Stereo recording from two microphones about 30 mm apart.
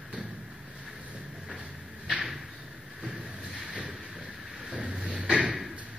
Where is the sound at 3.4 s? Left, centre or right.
Right.